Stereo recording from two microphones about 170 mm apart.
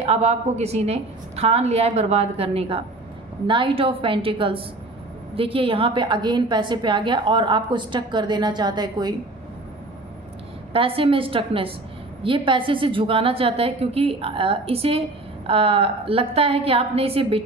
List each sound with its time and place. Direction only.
0.0 s a woman's voice: 40° right (ahead or behind); by 9.1 s 25° right (ahead or behind)
10.7 s a woman's voice: 35° right (ahead or behind)